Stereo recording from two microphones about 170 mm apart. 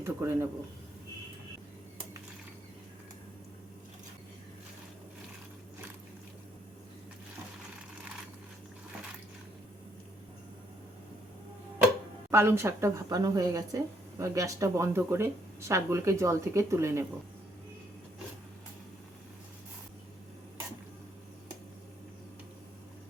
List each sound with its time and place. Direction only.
0.0 s speech: 15° right (ahead or behind)
12.3 s speech: 15° right (ahead or behind)